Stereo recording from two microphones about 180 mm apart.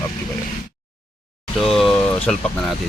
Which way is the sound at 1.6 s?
Centre (ahead or behind).